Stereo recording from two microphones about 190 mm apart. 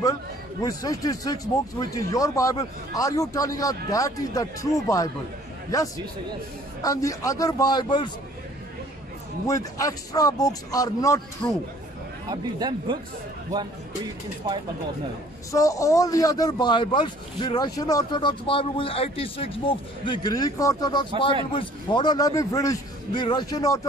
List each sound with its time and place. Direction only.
0.6 s speech: 20° left (ahead or behind)
9.5 s speech: 20° left (ahead or behind)
12.3 s a man's voice: 20° right (ahead or behind)
15.5 s speech: 15° left (ahead or behind)